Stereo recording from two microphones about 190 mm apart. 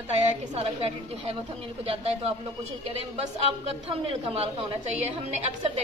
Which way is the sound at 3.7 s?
30° right (ahead or behind).